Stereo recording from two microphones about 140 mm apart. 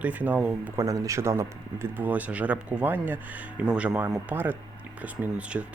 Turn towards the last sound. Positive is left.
turn(degrees=-10)  # may be behind; listen again after turning